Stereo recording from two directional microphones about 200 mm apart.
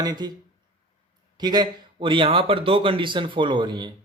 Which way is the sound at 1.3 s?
20° right (ahead or behind).